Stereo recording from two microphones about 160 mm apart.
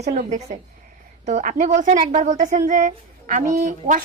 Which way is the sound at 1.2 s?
50° right (ahead or behind).